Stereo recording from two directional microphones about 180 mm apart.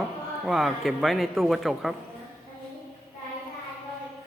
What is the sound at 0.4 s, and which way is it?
A man's voice, centre (ahead or behind).